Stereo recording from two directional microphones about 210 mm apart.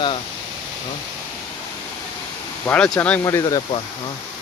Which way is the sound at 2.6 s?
5° left (ahead or behind).